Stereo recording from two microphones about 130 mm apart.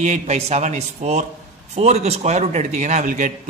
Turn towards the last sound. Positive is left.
turn(degrees=-70)  # may be behind; listen again after turning